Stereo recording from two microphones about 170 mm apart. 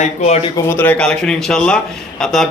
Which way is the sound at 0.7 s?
10° left (ahead or behind).